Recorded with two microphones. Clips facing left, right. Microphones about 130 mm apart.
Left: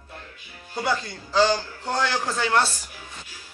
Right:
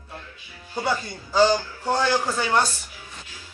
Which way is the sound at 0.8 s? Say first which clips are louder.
Even; 10° right (ahead or behind).